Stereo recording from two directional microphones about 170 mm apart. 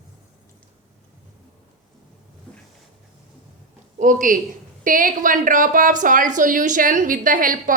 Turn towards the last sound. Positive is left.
turn(degrees=-50)  # may be behind; listen again after turning